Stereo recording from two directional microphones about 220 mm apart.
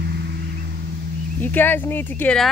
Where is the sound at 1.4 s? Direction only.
10° left (ahead or behind).